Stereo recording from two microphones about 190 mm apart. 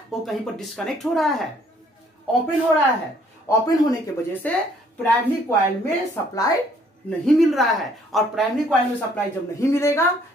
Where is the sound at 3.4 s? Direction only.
20° left (ahead or behind).